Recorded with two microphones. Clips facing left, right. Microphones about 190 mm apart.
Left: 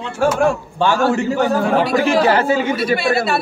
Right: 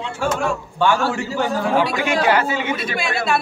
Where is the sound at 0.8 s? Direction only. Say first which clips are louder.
Left 2 dB; 40° left (ahead or behind).